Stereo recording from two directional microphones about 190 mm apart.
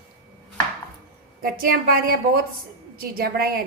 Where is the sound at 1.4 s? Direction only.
50° right (ahead or behind).